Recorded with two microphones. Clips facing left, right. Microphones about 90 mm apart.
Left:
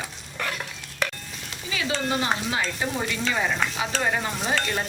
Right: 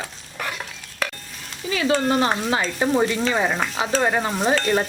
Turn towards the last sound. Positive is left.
turn(degrees=-40)  # may be behind; listen again after turning